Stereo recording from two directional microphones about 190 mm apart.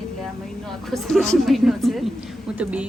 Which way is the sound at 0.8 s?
Centre (ahead or behind).